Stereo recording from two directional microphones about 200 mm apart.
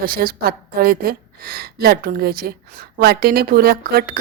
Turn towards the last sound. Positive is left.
turn(degrees=-50)  # may be behind; listen again after turning